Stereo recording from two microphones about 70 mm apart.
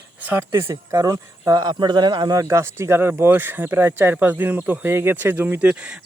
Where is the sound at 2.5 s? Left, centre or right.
Right.